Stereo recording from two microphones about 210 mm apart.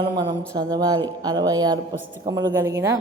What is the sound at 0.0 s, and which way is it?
Speech, 20° right (ahead or behind).